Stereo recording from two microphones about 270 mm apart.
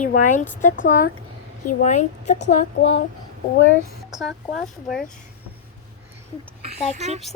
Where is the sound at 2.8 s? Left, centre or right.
Left.